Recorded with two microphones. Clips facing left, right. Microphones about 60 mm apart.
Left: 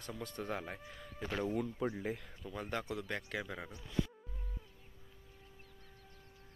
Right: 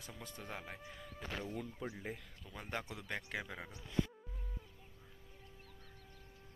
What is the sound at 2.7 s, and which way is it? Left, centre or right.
Speech, right.